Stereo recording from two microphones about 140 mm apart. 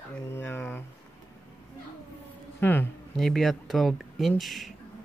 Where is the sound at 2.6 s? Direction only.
15° left (ahead or behind).